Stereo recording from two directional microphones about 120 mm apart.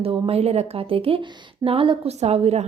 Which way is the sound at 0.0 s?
55° right (ahead or behind).